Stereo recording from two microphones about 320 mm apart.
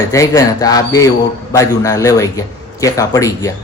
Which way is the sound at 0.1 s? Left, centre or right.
Centre.